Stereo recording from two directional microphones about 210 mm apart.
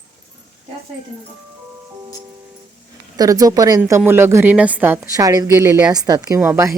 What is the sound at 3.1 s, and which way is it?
A woman's voice, 15° right (ahead or behind).